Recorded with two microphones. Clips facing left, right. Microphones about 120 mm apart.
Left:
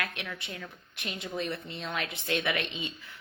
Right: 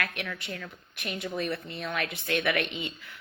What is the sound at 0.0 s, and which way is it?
A woman's voice, 25° left (ahead or behind).